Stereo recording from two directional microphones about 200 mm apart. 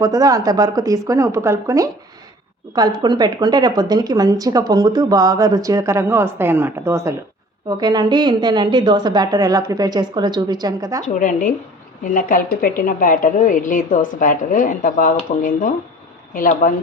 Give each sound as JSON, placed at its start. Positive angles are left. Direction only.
{"t": 0.0, "sound": "a woman's voice", "side_deg": -20}
{"t": 11.0, "sound": "a woman's voice", "side_deg": 40}